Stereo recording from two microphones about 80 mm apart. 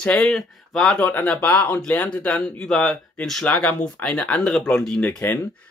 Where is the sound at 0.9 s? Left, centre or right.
Centre.